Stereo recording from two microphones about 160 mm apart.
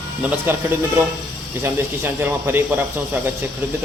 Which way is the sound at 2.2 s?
15° right (ahead or behind).